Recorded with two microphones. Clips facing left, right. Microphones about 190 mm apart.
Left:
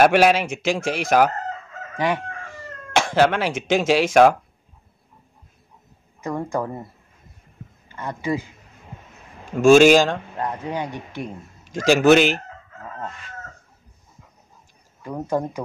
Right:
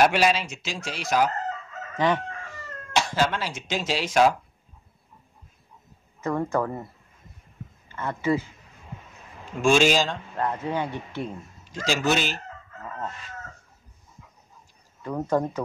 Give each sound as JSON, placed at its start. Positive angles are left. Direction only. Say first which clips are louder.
{"t": 0.0, "sound": "speech", "louder": "left 5 dB", "side_deg": 55}
{"t": 2.0, "sound": "chicken", "louder": "even", "side_deg": 10}
{"t": 2.9, "sound": "speech", "louder": "left 6 dB", "side_deg": 50}
{"t": 6.2, "sound": "a man's voice", "louder": "even", "side_deg": 10}
{"t": 7.9, "sound": "a man's voice", "louder": "right 1 dB", "side_deg": 15}
{"t": 9.6, "sound": "speech", "louder": "left 8 dB", "side_deg": 45}
{"t": 10.3, "sound": "a man's voice", "louder": "even", "side_deg": 15}
{"t": 11.7, "sound": "a man's voice", "louder": "left 10 dB", "side_deg": 50}
{"t": 15.0, "sound": "a man's voice", "louder": "even", "side_deg": 10}